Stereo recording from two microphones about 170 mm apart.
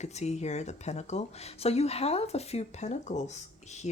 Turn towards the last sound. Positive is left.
turn(degrees=45)  # may be behind; listen again after turning